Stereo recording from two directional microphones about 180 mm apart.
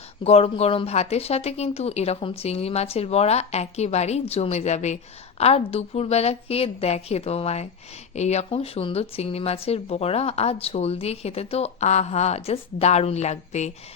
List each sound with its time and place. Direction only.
0.3 s speech: 35° left (ahead or behind)